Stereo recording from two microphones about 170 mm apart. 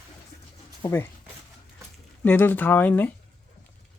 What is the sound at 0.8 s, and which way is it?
Speech, 15° left (ahead or behind).